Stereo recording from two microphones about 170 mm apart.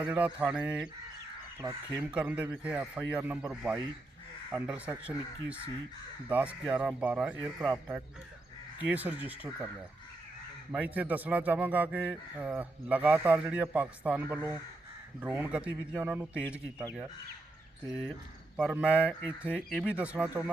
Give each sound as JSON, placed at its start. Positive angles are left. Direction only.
{"t": 0.0, "sound": "a man's voice", "side_deg": -10}
{"t": 1.6, "sound": "speech", "side_deg": -25}
{"t": 2.0, "sound": "a man's voice", "side_deg": -5}
{"t": 10.7, "sound": "a man's voice", "side_deg": -10}
{"t": 18.5, "sound": "a man's voice", "side_deg": -5}